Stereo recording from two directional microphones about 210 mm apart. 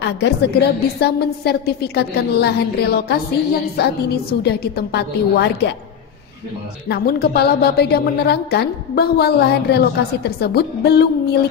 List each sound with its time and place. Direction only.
0.0 s a woman's voice: 50° left (ahead or behind)
6.9 s a woman's voice: 50° left (ahead or behind)